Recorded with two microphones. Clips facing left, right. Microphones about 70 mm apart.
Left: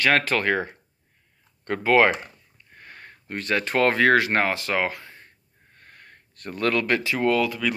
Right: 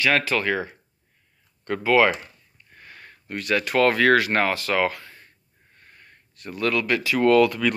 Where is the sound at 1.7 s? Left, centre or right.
Left.